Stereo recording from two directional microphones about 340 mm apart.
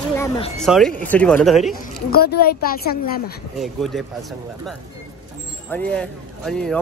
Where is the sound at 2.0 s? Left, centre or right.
Left.